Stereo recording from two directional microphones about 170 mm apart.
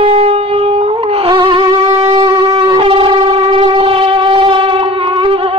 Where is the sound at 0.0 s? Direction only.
35° right (ahead or behind).